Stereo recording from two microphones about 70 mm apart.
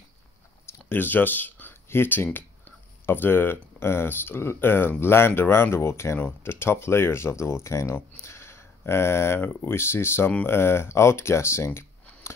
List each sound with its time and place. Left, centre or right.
0.7 s speech: left
8.2 s a sound: left
9.4 s speech: left